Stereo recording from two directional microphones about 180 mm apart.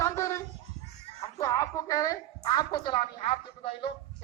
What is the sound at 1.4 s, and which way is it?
Music, 20° left (ahead or behind).